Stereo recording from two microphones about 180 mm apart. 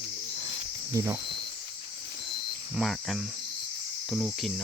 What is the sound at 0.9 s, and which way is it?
Speech, 20° right (ahead or behind).